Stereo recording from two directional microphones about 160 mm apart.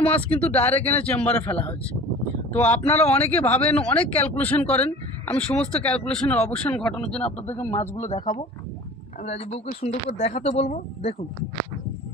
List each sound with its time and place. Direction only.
0.0 s speech: 10° left (ahead or behind)
2.5 s speech: 10° left (ahead or behind)
8.0 s speech: 50° left (ahead or behind)